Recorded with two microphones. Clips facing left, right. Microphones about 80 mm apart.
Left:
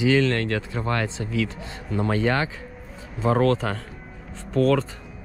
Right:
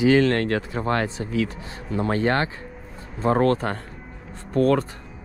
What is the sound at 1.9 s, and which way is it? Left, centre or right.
Speech, right.